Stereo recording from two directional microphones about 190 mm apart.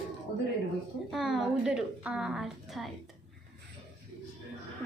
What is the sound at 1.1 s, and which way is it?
A woman's voice, centre (ahead or behind).